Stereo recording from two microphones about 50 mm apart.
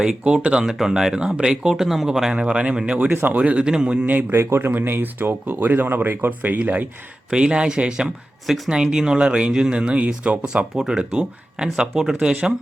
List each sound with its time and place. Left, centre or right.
0.0 s speech: centre
0.6 s speech: centre
1.7 s speech: centre
2.3 s speech: right
3.1 s speech: right
3.3 s speech: right
4.1 s speech: right
4.4 s a man's voice: right
4.7 s speech: right
7.3 s speech: centre
8.4 s speech: centre
8.7 s speech: centre